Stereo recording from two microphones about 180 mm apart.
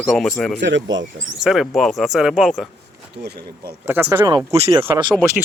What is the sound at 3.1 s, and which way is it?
Speech, 65° right (ahead or behind).